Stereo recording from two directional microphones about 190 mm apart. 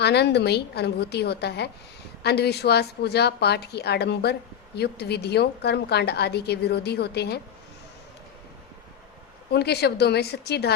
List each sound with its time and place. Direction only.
0.0 s a woman's voice: 60° left (ahead or behind)
9.5 s a woman's voice: 60° left (ahead or behind)